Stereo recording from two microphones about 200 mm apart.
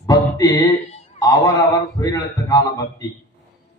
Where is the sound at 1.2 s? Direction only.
15° left (ahead or behind).